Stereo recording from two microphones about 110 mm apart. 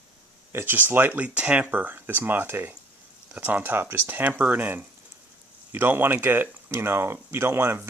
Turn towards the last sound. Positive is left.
turn(degrees=-20)  # may be behind; listen again after turning